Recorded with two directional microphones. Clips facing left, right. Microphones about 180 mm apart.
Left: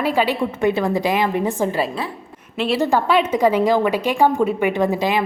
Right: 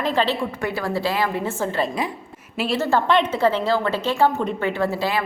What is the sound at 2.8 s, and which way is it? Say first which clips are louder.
A woman's voice: left 1 dB; 10° left (ahead or behind).